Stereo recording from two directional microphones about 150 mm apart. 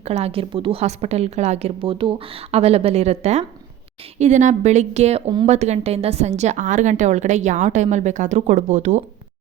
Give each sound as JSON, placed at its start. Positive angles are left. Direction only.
{"t": 0.0, "sound": "a woman's voice", "side_deg": -45}